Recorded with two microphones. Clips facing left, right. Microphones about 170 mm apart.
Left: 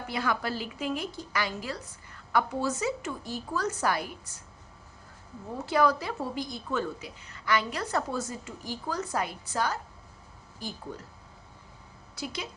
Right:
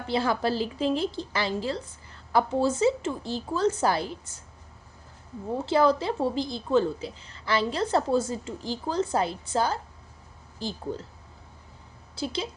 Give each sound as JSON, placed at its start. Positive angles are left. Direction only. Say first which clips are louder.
{"t": 0.1, "sound": "a woman's voice", "louder": "right 6 dB", "side_deg": -30}
{"t": 5.5, "sound": "a woman's voice", "louder": "right 3 dB", "side_deg": -25}
{"t": 12.1, "sound": "a woman's voice", "louder": "right 6 dB", "side_deg": -30}